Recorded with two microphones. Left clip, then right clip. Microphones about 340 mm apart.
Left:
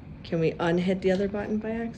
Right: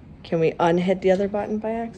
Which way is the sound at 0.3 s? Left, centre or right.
Centre.